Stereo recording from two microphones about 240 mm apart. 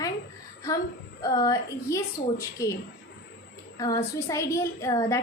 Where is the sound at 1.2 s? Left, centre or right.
Centre.